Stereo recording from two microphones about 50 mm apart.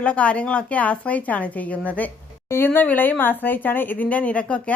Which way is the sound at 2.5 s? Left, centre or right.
Left.